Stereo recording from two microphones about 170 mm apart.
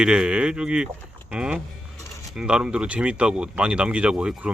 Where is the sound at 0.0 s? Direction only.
5° right (ahead or behind).